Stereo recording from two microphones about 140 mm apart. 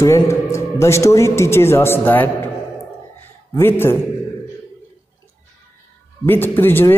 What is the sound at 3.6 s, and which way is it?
Speech, 15° left (ahead or behind).